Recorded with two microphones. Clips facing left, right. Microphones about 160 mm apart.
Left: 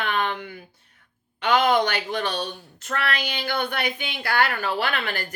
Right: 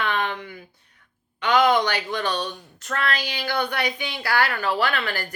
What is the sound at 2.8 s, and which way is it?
Speech, 50° left (ahead or behind).